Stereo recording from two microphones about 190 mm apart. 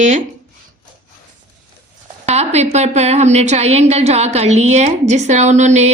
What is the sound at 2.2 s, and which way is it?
A woman's voice, 35° right (ahead or behind).